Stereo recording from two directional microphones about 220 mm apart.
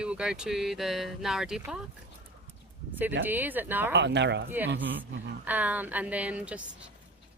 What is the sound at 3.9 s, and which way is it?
Speech, 50° right (ahead or behind).